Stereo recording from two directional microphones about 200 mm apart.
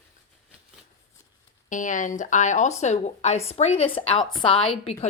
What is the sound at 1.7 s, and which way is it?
A woman's voice, 40° left (ahead or behind).